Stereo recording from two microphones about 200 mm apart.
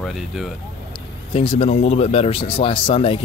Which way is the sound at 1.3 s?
30° left (ahead or behind).